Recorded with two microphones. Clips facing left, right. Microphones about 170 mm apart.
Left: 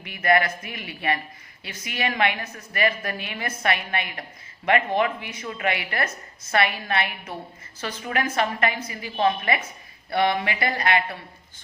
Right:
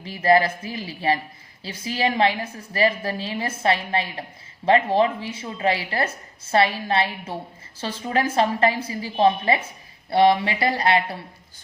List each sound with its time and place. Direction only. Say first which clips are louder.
0.0 s a woman's voice: right 3 dB; 30° right (ahead or behind)